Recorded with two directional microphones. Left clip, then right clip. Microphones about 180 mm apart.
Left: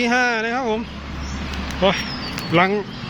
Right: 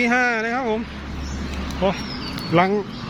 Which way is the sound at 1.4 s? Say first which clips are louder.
Left 2 dB; 15° left (ahead or behind).